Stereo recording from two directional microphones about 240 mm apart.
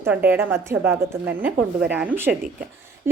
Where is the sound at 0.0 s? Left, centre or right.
Centre.